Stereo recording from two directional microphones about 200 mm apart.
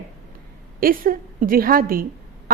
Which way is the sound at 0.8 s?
45° right (ahead or behind).